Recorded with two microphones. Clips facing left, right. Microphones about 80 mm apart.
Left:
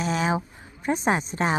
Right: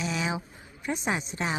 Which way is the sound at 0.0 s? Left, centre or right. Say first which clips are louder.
Left 6 dB; left.